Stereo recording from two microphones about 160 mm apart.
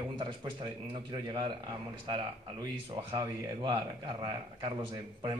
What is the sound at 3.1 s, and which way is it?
A man's voice, 30° right (ahead or behind).